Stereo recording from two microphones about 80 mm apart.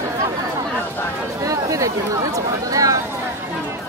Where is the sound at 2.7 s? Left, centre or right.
Right.